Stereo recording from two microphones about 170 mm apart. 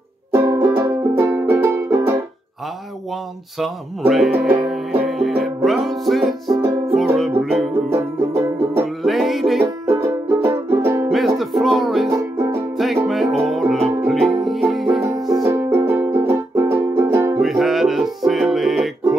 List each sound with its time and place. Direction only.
0.3 s music: 15° right (ahead or behind)
3.5 s speech: centre (ahead or behind)
5.4 s music: centre (ahead or behind)
6.5 s music: 20° right (ahead or behind)
7.9 s music: 15° right (ahead or behind)
8.8 s music: centre (ahead or behind)
9.8 s music: 15° right (ahead or behind)
11.1 s music: centre (ahead or behind)
12.1 s music: 15° right (ahead or behind)
12.7 s music: centre (ahead or behind)
15.4 s music: 15° right (ahead or behind)
17.4 s music: centre (ahead or behind)